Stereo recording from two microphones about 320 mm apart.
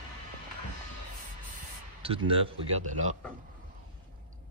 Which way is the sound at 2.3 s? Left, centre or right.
Centre.